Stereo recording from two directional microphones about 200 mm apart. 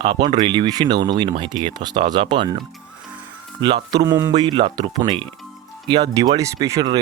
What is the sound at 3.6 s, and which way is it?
Speech, 25° right (ahead or behind).